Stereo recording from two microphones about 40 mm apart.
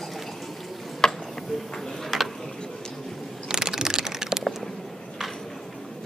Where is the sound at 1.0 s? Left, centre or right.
Centre.